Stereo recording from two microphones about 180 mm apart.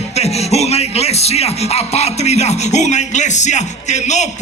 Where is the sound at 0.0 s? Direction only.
35° left (ahead or behind).